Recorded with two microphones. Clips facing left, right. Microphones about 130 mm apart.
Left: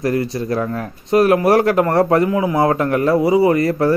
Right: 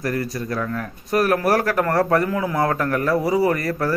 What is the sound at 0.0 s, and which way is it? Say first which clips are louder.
A man's voice: left 6 dB; 25° left (ahead or behind).